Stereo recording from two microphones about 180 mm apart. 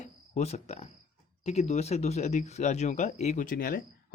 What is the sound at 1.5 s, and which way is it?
Speech, 35° left (ahead or behind).